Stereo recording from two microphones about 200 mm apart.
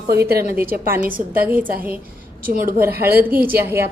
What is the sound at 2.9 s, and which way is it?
Speech, 50° right (ahead or behind).